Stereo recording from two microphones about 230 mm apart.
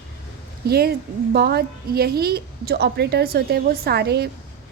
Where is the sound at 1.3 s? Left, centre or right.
Right.